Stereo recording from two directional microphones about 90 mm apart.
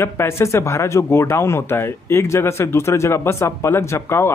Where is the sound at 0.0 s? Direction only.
30° left (ahead or behind).